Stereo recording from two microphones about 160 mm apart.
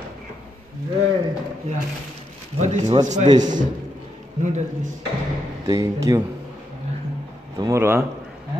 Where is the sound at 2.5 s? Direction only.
45° right (ahead or behind).